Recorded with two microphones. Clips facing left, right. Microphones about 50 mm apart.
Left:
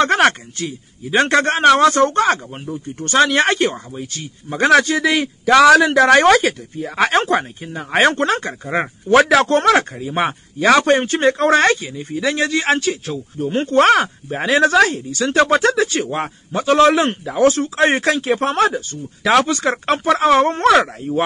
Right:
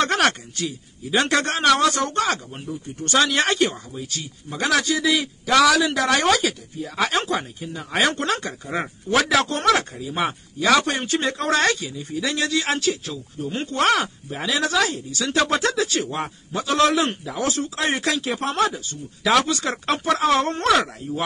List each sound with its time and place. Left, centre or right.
0.0 s speech: left